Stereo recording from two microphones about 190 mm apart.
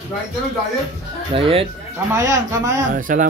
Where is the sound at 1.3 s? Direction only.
30° right (ahead or behind).